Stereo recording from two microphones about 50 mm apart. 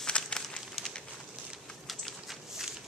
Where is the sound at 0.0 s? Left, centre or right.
Centre.